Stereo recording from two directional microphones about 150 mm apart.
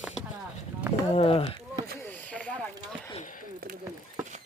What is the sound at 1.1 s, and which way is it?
Speech, 40° left (ahead or behind).